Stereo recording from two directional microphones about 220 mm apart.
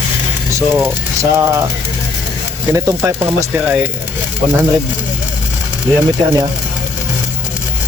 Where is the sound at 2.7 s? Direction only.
15° right (ahead or behind).